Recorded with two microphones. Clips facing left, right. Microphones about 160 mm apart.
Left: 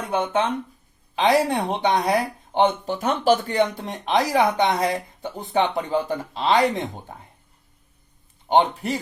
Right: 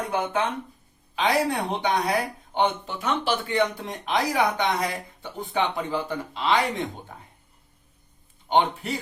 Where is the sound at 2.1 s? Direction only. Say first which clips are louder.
Left 4 dB; 40° left (ahead or behind).